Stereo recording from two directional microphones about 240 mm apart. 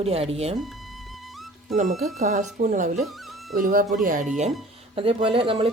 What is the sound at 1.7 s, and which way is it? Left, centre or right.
Speech, right.